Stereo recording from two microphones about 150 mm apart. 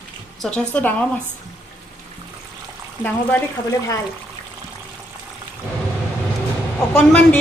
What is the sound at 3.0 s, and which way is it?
Speech, 10° left (ahead or behind).